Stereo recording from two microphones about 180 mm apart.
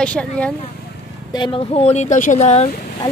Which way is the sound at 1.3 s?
30° left (ahead or behind).